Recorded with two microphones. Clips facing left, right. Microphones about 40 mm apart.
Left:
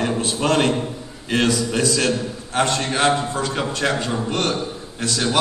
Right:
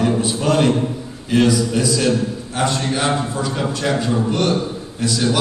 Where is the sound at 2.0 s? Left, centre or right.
Left.